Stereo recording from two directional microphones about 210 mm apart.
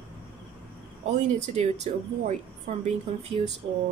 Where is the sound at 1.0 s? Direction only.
35° right (ahead or behind).